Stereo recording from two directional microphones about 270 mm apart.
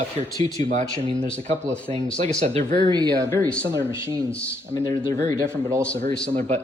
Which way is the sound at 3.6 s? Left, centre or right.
Centre.